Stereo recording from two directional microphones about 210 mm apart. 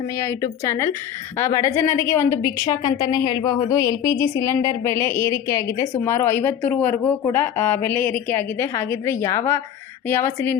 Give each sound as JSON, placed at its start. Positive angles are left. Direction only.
{"t": 0.2, "sound": "a woman's voice", "side_deg": 15}